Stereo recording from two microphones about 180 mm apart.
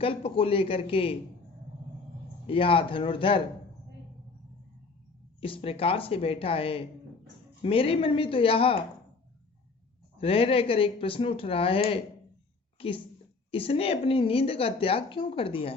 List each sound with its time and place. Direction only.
0.0 s a woman's voice: 30° left (ahead or behind)
2.5 s speech: 30° left (ahead or behind)
5.4 s a woman's voice: 30° left (ahead or behind)
10.2 s a woman's voice: 30° left (ahead or behind)